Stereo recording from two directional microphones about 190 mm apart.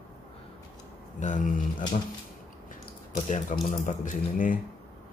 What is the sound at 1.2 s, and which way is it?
Speech, 40° left (ahead or behind).